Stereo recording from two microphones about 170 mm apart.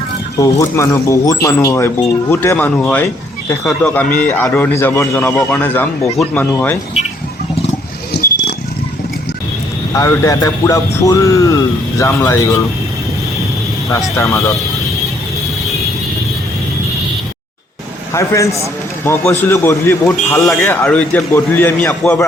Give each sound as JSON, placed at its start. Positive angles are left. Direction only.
{"t": 0.6, "sound": "a man's voice", "side_deg": 20}
{"t": 8.1, "sound": "a sound", "side_deg": 80}
{"t": 9.9, "sound": "speech", "side_deg": 20}
{"t": 14.2, "sound": "a man's voice", "side_deg": 15}
{"t": 18.1, "sound": "a man's voice", "side_deg": 20}